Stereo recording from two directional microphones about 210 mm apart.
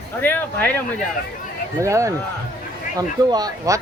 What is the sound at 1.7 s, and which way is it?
Speech, 15° right (ahead or behind).